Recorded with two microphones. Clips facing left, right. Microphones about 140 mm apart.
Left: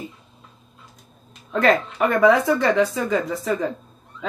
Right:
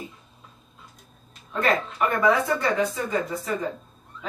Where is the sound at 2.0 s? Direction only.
90° left.